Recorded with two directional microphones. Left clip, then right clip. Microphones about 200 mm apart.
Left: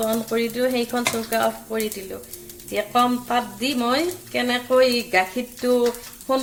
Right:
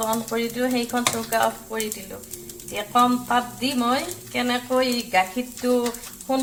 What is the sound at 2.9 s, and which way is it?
Speech, 45° left (ahead or behind).